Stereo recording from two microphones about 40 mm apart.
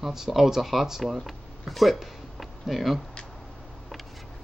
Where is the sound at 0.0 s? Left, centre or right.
Centre.